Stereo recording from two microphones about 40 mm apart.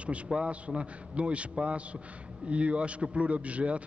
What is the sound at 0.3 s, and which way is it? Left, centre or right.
A man's voice, right.